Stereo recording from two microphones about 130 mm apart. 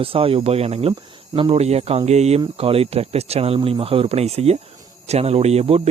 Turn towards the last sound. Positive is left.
turn(degrees=-50)  # may be behind; listen again after turning